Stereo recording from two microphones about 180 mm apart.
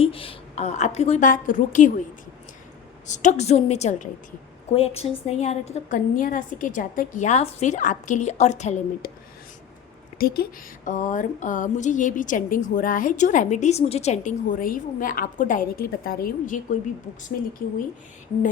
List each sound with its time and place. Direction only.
0.0 s a woman's voice: 30° left (ahead or behind)
3.1 s a woman's voice: 40° left (ahead or behind)
10.2 s speech: 60° left (ahead or behind)